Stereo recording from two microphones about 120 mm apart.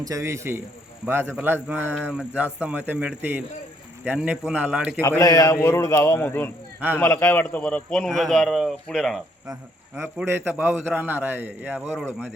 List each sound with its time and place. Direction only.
0.0 s a man's voice: 25° right (ahead or behind); by 4.9 s 10° right (ahead or behind)
4.9 s a man's voice: 25° left (ahead or behind); by 9.2 s centre (ahead or behind)
10.2 s a man's voice: 15° right (ahead or behind)